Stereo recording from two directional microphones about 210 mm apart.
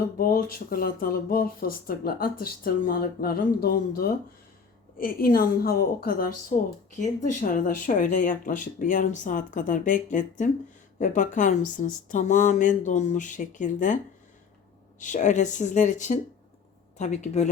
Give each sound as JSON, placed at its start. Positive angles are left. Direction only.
{"t": 0.2, "sound": "speech", "side_deg": 40}